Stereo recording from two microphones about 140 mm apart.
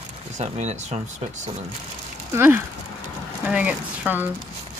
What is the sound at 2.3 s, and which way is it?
Speech, 15° right (ahead or behind).